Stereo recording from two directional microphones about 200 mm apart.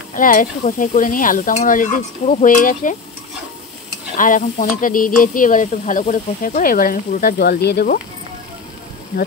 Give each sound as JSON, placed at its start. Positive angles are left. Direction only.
{"t": 0.1, "sound": "stir", "side_deg": 45}
{"t": 4.2, "sound": "sizzle", "side_deg": 40}